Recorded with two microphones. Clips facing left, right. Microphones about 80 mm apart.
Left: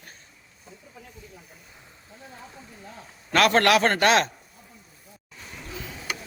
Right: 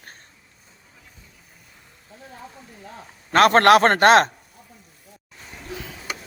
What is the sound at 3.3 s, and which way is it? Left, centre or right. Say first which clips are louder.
A man's voice: right 5 dB; right.